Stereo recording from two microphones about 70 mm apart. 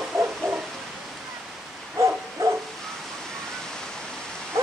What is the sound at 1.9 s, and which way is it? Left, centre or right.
Bow-wow, right.